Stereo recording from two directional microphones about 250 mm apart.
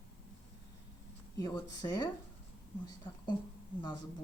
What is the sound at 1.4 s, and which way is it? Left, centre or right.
Speech, centre.